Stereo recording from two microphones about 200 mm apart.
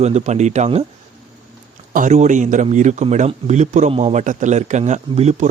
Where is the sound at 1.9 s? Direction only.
40° right (ahead or behind).